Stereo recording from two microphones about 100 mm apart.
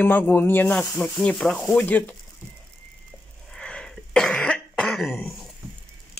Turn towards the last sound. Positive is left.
turn(degrees=10)  # may be behind; listen again after turning